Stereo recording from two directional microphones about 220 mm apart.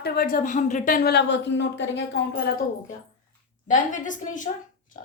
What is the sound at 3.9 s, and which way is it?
Speech, 35° left (ahead or behind).